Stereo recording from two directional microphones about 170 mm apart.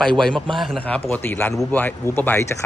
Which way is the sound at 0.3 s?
30° right (ahead or behind).